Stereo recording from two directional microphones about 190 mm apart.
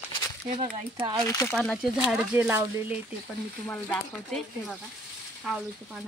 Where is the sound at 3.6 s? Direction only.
10° left (ahead or behind).